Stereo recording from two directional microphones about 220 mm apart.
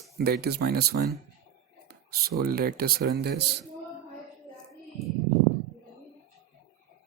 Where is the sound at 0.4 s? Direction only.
45° right (ahead or behind).